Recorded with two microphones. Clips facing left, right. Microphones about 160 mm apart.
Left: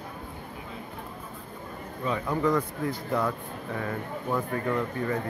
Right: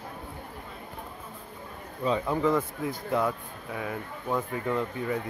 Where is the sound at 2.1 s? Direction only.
20° right (ahead or behind).